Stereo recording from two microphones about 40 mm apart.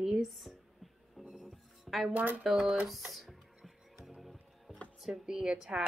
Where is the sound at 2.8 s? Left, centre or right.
Centre.